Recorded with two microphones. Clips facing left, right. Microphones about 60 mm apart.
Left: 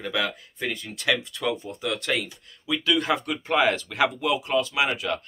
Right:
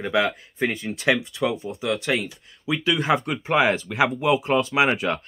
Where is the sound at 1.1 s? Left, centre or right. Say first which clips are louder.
Right 3 dB; centre.